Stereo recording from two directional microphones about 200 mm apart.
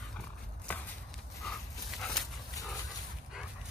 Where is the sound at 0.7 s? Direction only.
5° left (ahead or behind).